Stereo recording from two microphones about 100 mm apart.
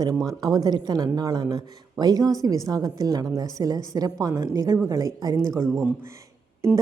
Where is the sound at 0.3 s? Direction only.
40° right (ahead or behind).